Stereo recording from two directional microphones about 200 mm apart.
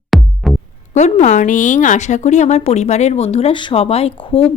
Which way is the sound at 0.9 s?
35° left (ahead or behind).